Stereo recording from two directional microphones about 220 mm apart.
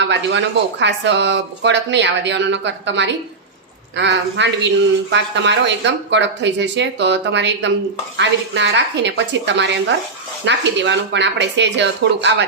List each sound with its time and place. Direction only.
0.0 s speech: 55° right (ahead or behind)